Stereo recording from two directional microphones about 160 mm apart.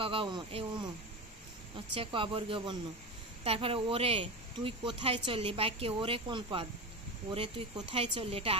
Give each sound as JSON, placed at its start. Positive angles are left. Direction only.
{"t": 0.0, "sound": "speech", "side_deg": -35}
{"t": 2.0, "sound": "speech", "side_deg": -30}